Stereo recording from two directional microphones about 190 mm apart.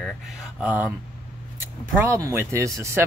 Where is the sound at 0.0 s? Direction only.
5° right (ahead or behind).